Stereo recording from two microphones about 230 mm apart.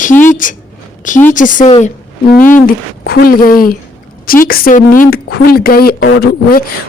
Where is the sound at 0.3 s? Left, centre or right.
Left.